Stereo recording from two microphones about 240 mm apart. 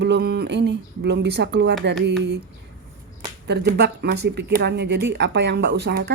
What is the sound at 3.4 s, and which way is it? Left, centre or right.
Speech, right.